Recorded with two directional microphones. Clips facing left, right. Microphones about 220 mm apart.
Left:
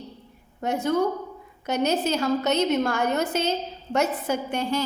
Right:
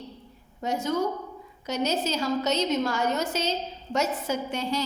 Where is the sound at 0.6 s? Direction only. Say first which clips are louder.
Left 3 dB; 55° left (ahead or behind).